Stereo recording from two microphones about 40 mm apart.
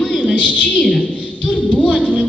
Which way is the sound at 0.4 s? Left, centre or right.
Left.